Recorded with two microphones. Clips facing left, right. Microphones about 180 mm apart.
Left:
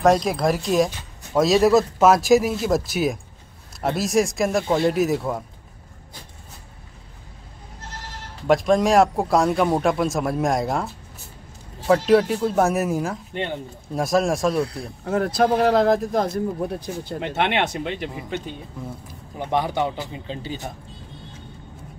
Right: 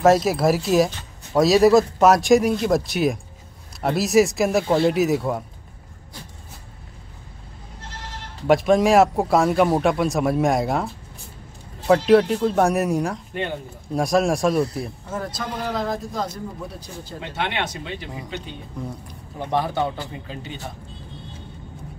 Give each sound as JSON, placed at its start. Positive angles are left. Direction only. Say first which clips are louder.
{"t": 0.0, "sound": "speech", "louder": "right 2 dB", "side_deg": -5}
{"t": 8.5, "sound": "speech", "louder": "right 1 dB", "side_deg": 0}
{"t": 11.9, "sound": "speech", "louder": "right 1 dB", "side_deg": 0}
{"t": 15.0, "sound": "speech", "louder": "left 15 dB", "side_deg": 65}
{"t": 19.0, "sound": "speech", "louder": "left 1 dB", "side_deg": 15}